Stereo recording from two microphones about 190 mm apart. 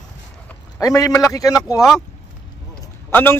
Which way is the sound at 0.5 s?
20° left (ahead or behind).